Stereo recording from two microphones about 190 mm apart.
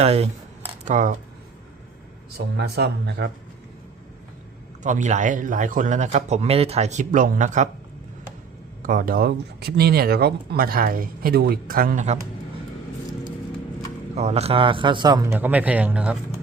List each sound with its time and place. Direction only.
0.0 s a man's voice: 30° right (ahead or behind)
0.7 s camera: 40° right (ahead or behind)
2.6 s speech: 60° right (ahead or behind)
4.8 s a man's voice: 40° right (ahead or behind)
8.8 s speech: 45° right (ahead or behind)
14.2 s a man's voice: 35° right (ahead or behind); by 16.1 s 5° right (ahead or behind)